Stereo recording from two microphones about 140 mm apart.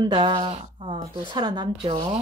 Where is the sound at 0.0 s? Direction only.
35° right (ahead or behind).